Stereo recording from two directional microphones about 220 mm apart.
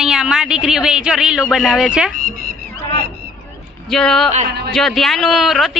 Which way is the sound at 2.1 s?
40° right (ahead or behind).